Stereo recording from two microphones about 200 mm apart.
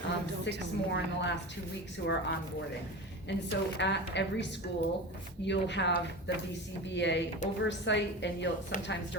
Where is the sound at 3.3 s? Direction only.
60° left (ahead or behind).